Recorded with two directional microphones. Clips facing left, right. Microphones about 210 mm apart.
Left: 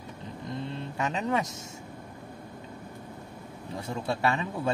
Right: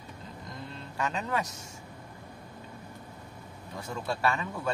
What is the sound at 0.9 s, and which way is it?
Speech, 20° left (ahead or behind).